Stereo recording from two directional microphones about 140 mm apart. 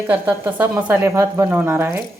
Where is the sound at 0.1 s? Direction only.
15° right (ahead or behind).